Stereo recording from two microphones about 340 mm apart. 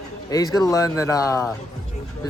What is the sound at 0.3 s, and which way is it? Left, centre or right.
Speech, centre.